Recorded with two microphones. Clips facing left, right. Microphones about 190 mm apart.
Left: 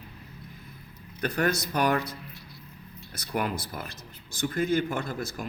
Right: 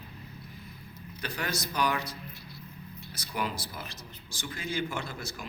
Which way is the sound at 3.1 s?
55° left (ahead or behind).